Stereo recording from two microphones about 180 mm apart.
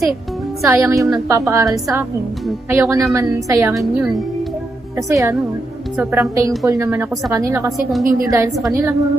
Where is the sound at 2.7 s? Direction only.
15° right (ahead or behind).